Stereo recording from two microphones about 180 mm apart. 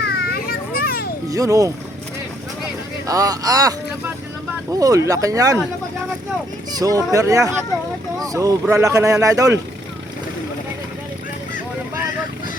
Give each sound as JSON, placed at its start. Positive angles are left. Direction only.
{"t": 0.2, "sound": "children playing", "side_deg": 60}
{"t": 1.3, "sound": "speech", "side_deg": -20}
{"t": 3.1, "sound": "speech", "side_deg": -20}
{"t": 6.7, "sound": "speech", "side_deg": -20}